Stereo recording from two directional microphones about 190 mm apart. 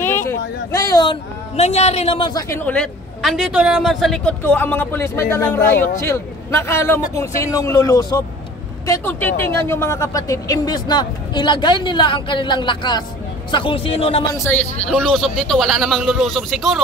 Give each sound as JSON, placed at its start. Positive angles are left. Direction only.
{"t": 0.0, "sound": "a sound", "side_deg": 15}
{"t": 1.6, "sound": "a man's voice", "side_deg": 35}
{"t": 2.5, "sound": "a man's voice", "side_deg": 5}
{"t": 14.3, "sound": "a man's voice", "side_deg": 10}